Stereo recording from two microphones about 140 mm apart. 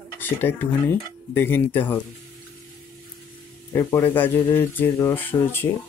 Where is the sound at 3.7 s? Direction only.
15° left (ahead or behind).